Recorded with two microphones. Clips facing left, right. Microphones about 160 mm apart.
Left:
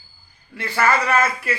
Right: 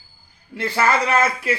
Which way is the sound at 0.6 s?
15° right (ahead or behind).